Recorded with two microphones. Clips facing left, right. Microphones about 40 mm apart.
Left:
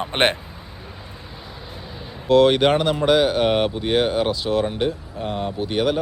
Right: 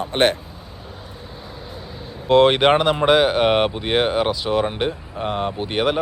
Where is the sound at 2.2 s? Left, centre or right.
Right.